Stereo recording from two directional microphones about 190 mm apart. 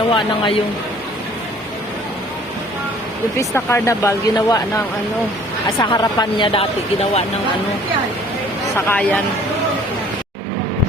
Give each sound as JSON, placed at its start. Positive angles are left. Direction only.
{"t": 0.1, "sound": "speech", "side_deg": 25}
{"t": 3.3, "sound": "speech", "side_deg": 15}
{"t": 8.9, "sound": "speech", "side_deg": 10}